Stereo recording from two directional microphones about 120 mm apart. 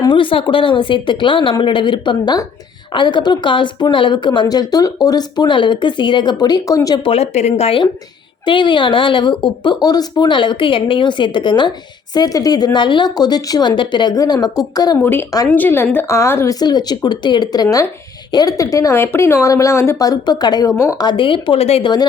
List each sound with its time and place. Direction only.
0.1 s speech: 45° left (ahead or behind); by 7.0 s 30° left (ahead or behind)
7.0 s speech: 60° left (ahead or behind)
8.4 s speech: 40° left (ahead or behind)
15.4 s speech: 15° left (ahead or behind)
16.6 s speech: 35° left (ahead or behind)
21.0 s speech: 40° left (ahead or behind)